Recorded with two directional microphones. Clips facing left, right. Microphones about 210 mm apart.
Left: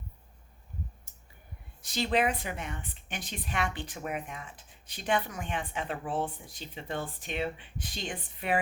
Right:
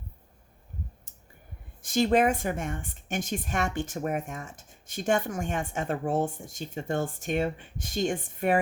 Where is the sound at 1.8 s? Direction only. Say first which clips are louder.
Right 6 dB; 50° right (ahead or behind).